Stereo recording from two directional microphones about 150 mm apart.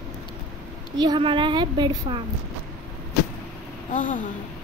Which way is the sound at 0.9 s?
30° right (ahead or behind).